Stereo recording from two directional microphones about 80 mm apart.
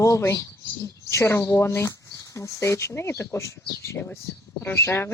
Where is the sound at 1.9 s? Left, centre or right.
Left.